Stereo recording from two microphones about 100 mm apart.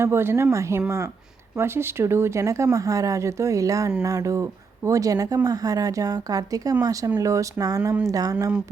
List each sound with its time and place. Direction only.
0.0 s speech: 25° right (ahead or behind)